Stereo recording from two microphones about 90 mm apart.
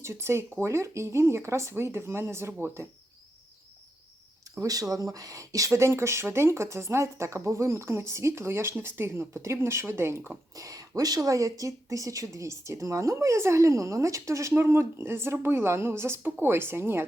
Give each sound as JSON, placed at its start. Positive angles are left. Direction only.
{"t": 0.0, "sound": "speech", "side_deg": -30}
{"t": 4.5, "sound": "speech", "side_deg": -40}
{"t": 10.5, "sound": "speech", "side_deg": -40}